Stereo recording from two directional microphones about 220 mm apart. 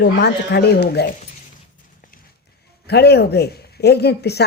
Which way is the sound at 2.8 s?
50° left (ahead or behind).